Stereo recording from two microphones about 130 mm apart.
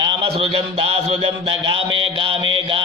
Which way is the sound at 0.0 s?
45° right (ahead or behind).